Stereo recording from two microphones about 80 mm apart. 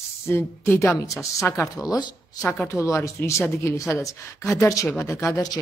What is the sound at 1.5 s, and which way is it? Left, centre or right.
Speech, left.